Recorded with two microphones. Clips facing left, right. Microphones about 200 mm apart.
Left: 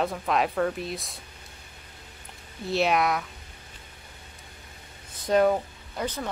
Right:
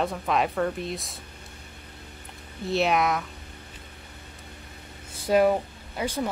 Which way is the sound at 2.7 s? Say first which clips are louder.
Even; centre (ahead or behind).